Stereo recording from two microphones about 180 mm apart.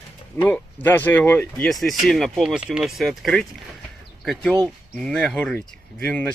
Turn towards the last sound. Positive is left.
turn(degrees=5)  # may be behind; listen again after turning